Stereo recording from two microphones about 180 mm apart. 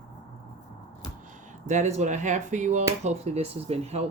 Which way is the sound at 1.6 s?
40° right (ahead or behind).